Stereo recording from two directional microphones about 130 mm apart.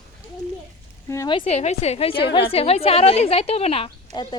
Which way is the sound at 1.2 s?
40° left (ahead or behind).